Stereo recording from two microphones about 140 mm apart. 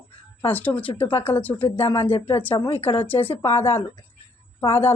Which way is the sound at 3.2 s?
45° left (ahead or behind).